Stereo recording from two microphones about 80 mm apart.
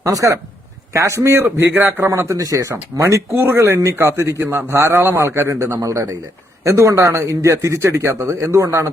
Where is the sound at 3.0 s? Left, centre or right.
Right.